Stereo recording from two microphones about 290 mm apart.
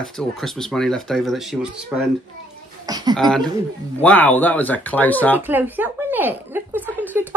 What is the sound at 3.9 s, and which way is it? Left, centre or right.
Speech, centre.